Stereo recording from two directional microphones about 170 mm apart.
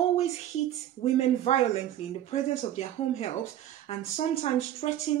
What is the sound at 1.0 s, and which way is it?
Speech, 40° left (ahead or behind).